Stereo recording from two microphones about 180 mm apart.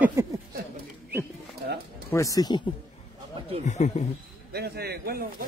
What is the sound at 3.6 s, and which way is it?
Speech, 40° left (ahead or behind).